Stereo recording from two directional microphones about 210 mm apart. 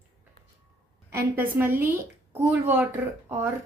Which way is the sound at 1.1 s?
10° right (ahead or behind).